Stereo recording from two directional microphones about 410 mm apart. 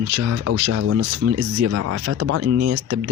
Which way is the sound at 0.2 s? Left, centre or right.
Right.